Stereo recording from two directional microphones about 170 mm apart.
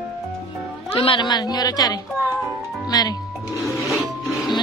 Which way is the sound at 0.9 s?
30° left (ahead or behind).